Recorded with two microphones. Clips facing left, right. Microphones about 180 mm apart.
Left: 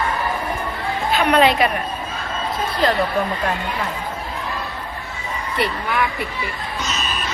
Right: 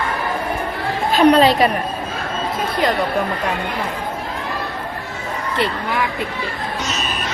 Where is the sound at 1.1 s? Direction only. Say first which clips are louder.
Right 4 dB; 40° right (ahead or behind).